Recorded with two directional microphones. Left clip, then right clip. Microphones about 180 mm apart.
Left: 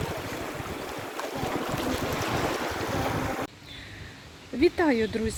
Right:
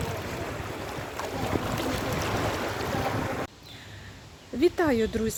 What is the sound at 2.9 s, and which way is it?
Boat, 45° left (ahead or behind).